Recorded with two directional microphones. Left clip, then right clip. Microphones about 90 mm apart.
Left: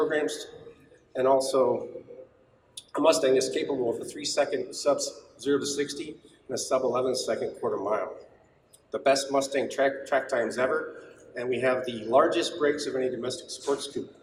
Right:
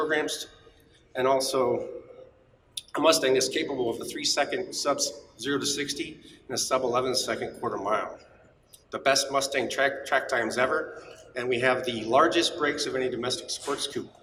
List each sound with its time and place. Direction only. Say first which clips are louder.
0.1 s speech: right 1 dB; 30° right (ahead or behind)
2.7 s speech: even; 30° right (ahead or behind)